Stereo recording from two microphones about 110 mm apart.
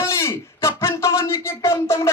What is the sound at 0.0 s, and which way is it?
A man's voice, 25° left (ahead or behind).